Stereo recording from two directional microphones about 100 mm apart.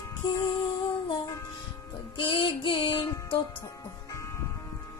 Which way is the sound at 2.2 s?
55° left (ahead or behind).